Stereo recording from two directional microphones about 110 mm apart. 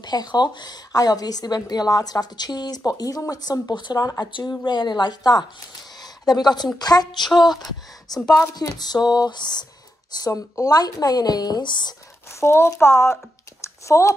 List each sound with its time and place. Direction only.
0.0 s a woman's voice: 40° left (ahead or behind)
5.9 s a sound: 40° left (ahead or behind)
6.8 s a woman's voice: 40° left (ahead or behind)
12.3 s speech: 25° left (ahead or behind)